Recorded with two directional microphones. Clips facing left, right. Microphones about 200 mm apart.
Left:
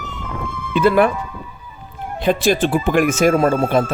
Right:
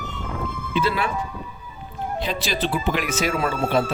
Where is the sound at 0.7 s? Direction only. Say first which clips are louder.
Left 10 dB; 50° left (ahead or behind).